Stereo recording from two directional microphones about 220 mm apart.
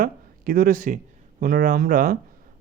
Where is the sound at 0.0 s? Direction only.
40° right (ahead or behind).